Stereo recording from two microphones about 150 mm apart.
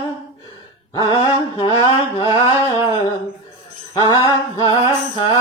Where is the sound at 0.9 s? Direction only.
30° left (ahead or behind).